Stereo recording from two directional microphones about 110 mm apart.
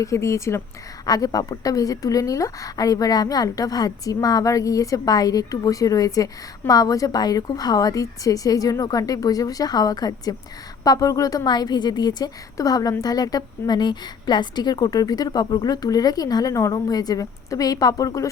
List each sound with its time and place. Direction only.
0.0 s speech: 30° left (ahead or behind)